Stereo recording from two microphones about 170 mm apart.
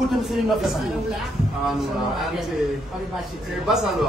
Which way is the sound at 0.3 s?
Centre (ahead or behind).